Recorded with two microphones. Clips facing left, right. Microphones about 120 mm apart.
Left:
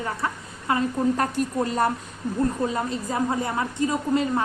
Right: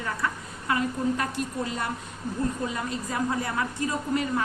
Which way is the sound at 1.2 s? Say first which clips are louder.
Left 5 dB; 45° left (ahead or behind).